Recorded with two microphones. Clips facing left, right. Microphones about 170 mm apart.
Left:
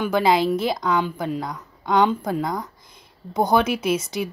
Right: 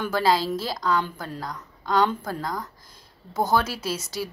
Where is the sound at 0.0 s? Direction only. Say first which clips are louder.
Left 4 dB; 20° left (ahead or behind).